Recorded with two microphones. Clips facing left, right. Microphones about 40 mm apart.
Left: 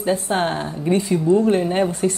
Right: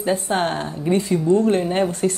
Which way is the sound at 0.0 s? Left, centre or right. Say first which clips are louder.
Even; centre.